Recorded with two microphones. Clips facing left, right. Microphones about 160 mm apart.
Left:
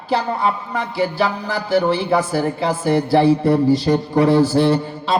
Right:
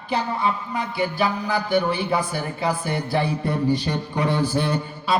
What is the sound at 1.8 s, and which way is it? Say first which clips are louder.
A man's voice: left 7 dB; 30° left (ahead or behind).